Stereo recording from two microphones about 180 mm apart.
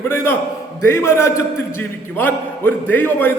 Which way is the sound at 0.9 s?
15° left (ahead or behind).